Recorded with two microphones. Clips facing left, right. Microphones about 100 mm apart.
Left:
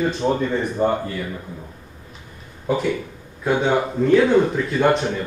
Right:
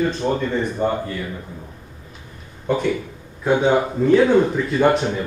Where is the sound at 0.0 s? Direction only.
5° left (ahead or behind).